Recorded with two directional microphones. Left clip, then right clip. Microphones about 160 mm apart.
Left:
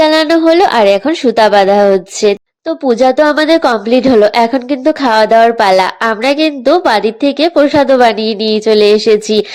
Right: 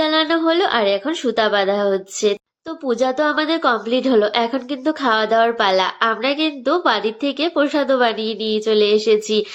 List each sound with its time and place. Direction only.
0.0 s a woman's voice: 45° left (ahead or behind)